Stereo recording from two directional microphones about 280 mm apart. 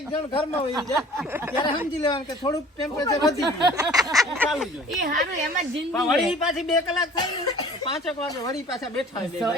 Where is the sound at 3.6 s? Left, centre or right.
Centre.